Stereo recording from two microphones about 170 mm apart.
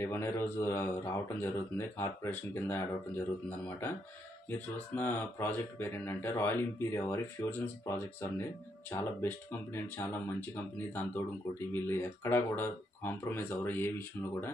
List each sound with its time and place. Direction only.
0.0 s speech: 15° left (ahead or behind)